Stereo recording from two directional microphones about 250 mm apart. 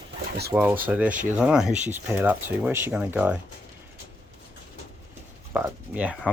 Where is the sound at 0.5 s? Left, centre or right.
Centre.